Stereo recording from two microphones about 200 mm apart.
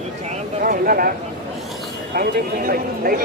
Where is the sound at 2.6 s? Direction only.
45° right (ahead or behind).